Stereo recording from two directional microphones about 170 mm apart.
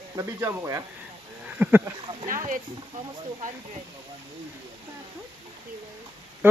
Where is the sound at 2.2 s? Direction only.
50° right (ahead or behind).